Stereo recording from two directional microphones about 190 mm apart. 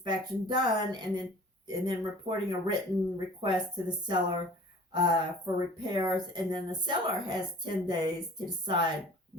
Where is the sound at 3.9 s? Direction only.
25° right (ahead or behind).